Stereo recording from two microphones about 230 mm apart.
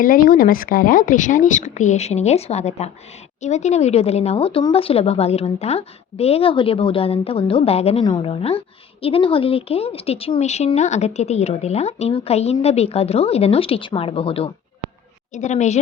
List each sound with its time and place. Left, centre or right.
0.0 s speech: left